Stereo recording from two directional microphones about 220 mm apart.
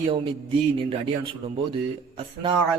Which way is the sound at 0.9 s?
25° right (ahead or behind).